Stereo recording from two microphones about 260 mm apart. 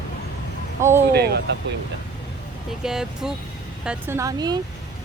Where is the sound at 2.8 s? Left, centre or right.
Centre.